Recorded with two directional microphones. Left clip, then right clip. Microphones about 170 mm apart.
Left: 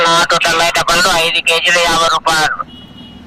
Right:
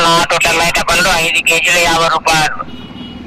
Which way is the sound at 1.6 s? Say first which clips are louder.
Even; 90° left.